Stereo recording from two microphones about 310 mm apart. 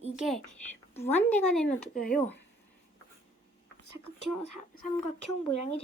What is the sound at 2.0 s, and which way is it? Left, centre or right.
Speech, left.